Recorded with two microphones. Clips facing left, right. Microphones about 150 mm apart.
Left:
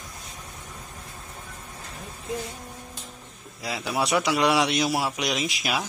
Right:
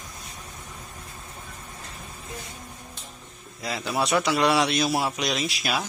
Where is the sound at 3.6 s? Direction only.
10° left (ahead or behind).